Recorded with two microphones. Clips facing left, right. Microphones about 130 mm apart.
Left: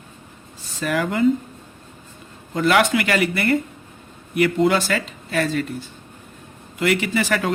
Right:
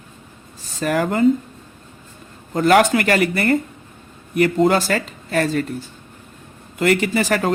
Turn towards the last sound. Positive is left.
turn(degrees=-40)  # may be behind; listen again after turning